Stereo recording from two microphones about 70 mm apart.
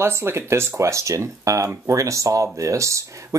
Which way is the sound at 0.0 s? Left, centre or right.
Right.